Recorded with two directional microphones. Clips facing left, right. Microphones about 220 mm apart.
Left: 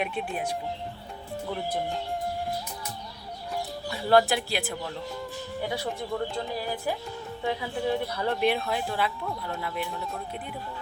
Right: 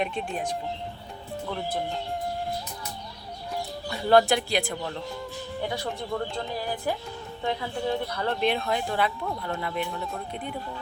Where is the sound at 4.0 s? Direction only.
5° left (ahead or behind).